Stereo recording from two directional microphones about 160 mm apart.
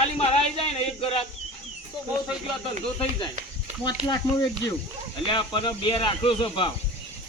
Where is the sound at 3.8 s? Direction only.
30° left (ahead or behind).